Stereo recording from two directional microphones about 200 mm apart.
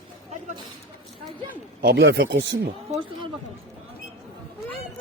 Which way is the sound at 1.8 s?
60° right (ahead or behind).